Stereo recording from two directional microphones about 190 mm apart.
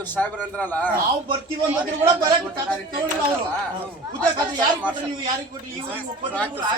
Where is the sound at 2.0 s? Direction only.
25° right (ahead or behind).